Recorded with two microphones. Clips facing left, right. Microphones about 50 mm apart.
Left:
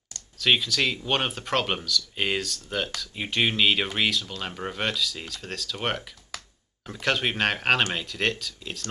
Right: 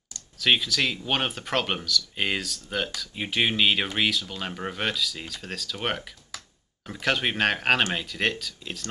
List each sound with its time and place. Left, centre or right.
0.4 s speech: centre